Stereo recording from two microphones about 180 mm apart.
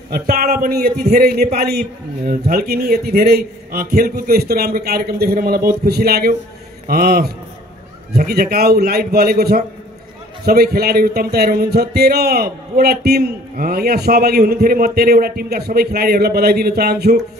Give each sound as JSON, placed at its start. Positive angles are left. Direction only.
{"t": 0.1, "sound": "speech", "side_deg": -55}